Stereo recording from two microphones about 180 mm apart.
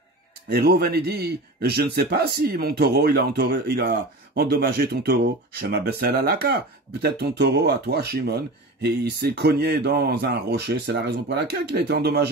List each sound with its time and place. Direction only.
0.5 s a man's voice: 60° right (ahead or behind)